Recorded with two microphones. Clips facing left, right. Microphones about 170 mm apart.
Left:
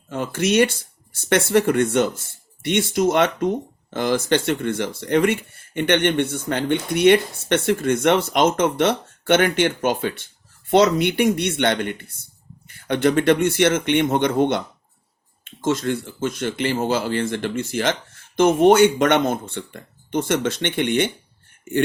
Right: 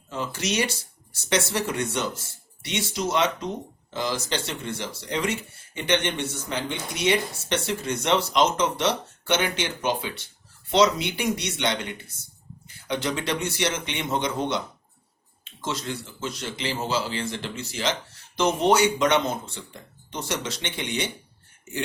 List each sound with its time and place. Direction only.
0.1 s speech: 55° left (ahead or behind)